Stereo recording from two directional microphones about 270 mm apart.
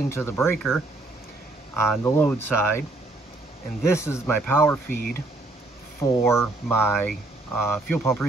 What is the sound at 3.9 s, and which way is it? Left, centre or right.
Speech, centre.